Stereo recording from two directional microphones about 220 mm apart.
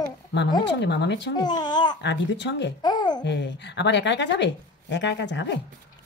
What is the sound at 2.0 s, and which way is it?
Speech, 55° left (ahead or behind).